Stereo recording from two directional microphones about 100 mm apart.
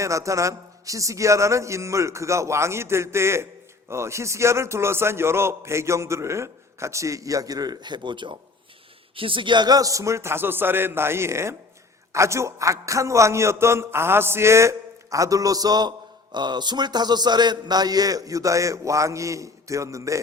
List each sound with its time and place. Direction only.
0.0 s a man's voice: 30° right (ahead or behind)